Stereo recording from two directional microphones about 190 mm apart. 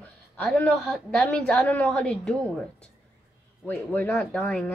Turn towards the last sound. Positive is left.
turn(degrees=5)  # may be behind; listen again after turning